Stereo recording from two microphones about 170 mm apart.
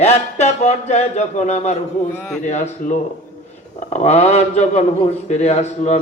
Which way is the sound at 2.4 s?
45° left (ahead or behind).